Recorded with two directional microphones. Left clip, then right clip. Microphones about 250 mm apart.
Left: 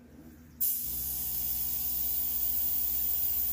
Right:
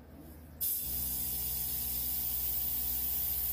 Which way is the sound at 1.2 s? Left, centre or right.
Right.